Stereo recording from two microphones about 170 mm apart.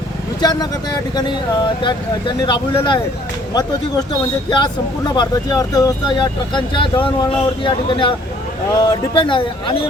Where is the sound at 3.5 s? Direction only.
25° left (ahead or behind).